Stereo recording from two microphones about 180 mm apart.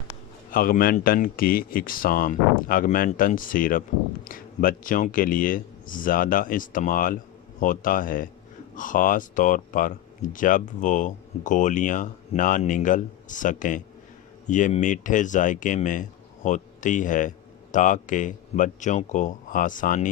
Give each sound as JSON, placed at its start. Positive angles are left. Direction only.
{"t": 0.5, "sound": "speech", "side_deg": 50}